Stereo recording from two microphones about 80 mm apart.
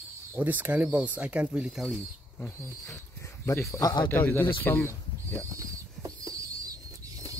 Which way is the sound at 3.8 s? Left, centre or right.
Left.